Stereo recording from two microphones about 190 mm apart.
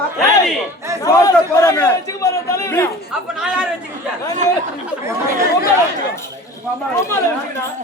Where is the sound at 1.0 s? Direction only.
15° left (ahead or behind).